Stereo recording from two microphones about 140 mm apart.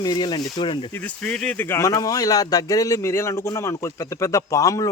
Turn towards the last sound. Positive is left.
turn(degrees=25)  # may be behind; listen again after turning